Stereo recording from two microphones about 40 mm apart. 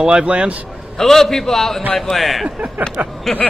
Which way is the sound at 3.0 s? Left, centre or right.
Right.